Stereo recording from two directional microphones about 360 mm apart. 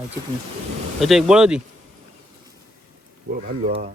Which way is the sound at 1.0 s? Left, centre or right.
Centre.